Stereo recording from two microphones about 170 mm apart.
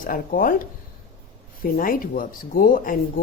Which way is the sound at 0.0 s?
55° left (ahead or behind).